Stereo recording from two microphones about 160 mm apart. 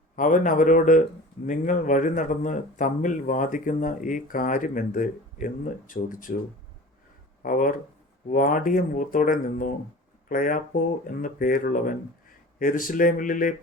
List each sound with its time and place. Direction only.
0.2 s speech: 55° left (ahead or behind)
7.4 s speech: 55° left (ahead or behind)